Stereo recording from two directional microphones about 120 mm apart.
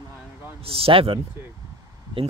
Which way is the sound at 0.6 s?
50° right (ahead or behind).